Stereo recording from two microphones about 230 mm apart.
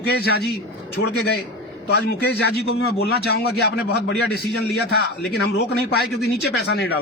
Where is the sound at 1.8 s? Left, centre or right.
Left.